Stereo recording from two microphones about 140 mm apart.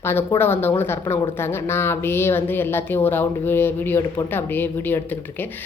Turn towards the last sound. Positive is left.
turn(degrees=15)  # may be behind; listen again after turning